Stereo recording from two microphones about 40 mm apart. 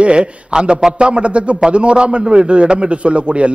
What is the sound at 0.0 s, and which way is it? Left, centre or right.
A man's voice, right.